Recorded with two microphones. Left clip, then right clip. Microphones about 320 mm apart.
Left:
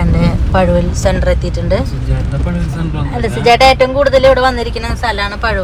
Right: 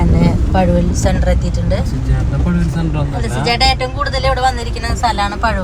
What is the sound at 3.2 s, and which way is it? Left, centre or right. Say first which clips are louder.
Speech: left 7 dB; centre.